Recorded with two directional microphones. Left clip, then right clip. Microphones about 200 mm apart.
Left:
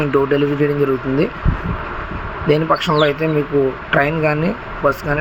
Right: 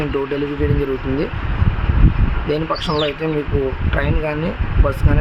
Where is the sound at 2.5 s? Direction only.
10° left (ahead or behind).